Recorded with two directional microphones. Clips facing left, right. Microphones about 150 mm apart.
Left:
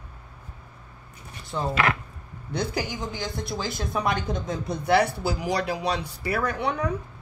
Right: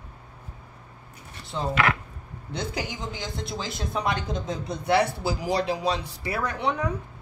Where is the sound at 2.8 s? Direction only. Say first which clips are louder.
Left 2 dB; 20° right (ahead or behind).